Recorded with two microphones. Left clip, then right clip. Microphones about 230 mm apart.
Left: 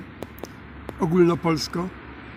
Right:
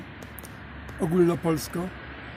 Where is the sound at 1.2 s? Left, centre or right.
Centre.